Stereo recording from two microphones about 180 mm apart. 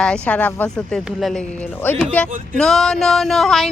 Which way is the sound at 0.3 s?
10° left (ahead or behind).